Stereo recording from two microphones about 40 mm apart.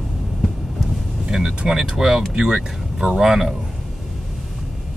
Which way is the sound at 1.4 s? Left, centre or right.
Centre.